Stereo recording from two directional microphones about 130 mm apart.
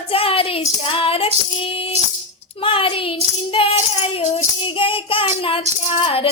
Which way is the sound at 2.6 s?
45° left (ahead or behind).